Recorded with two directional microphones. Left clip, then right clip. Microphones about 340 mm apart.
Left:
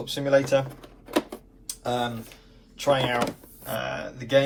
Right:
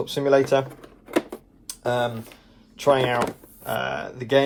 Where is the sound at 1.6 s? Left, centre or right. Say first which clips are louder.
Right 4 dB; centre.